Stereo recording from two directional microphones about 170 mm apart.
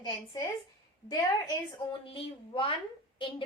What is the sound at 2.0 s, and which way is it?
Speech, 30° left (ahead or behind).